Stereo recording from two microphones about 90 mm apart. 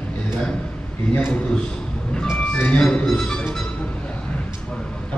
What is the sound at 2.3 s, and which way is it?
Speech, 15° left (ahead or behind).